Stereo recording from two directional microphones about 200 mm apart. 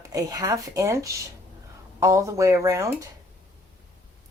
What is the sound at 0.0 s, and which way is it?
Speech, 15° right (ahead or behind).